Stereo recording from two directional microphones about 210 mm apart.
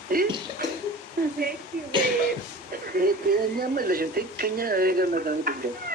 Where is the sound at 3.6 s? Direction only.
45° right (ahead or behind).